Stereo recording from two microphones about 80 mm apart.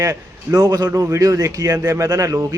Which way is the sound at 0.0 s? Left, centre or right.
Right.